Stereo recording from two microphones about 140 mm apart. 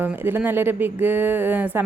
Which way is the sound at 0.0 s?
15° right (ahead or behind).